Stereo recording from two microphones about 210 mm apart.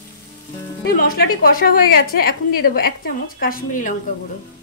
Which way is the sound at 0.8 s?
45° left (ahead or behind).